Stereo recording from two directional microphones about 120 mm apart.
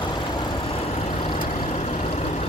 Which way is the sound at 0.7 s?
55° left (ahead or behind).